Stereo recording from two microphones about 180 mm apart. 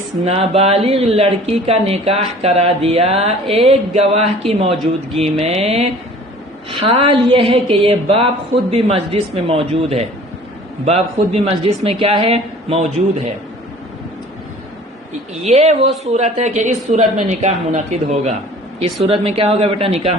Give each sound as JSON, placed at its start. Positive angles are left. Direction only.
{"t": 0.3, "sound": "speech", "side_deg": -35}
{"t": 15.4, "sound": "speech", "side_deg": -40}